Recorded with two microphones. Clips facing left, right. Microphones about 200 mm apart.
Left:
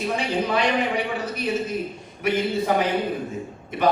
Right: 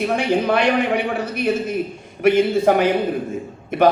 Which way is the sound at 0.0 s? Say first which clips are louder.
Right 6 dB; 60° right (ahead or behind).